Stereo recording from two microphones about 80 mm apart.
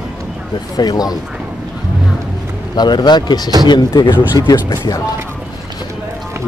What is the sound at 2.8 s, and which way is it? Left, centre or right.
Speech, left.